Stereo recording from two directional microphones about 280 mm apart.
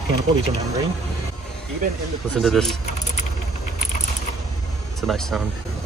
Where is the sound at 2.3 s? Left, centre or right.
Centre.